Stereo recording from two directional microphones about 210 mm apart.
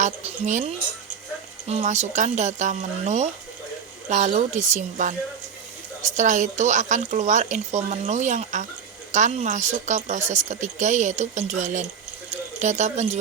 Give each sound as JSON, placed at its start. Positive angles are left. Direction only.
{"t": 0.0, "sound": "speech", "side_deg": -30}